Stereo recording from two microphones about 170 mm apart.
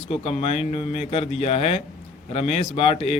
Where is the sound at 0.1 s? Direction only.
35° left (ahead or behind).